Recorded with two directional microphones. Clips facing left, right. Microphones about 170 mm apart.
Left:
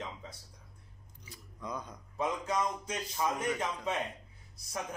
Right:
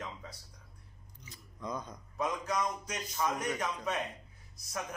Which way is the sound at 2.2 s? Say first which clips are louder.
Left 1 dB; 25° left (ahead or behind).